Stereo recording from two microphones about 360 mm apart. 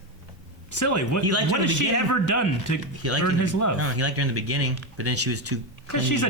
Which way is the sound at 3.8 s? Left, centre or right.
Right.